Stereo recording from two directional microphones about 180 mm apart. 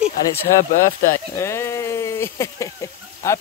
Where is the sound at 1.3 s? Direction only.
15° left (ahead or behind).